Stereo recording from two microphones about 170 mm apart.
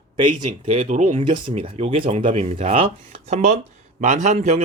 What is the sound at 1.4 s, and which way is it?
A man's voice, 35° right (ahead or behind).